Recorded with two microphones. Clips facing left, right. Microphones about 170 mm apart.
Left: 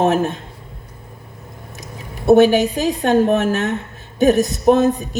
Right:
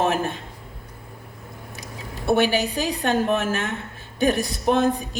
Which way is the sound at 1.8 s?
45° left (ahead or behind).